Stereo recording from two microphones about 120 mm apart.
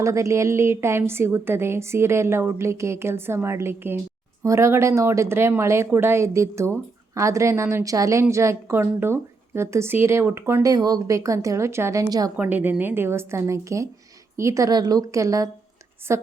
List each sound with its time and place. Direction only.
0.0 s speech: 25° right (ahead or behind)
12.4 s speech: 15° right (ahead or behind)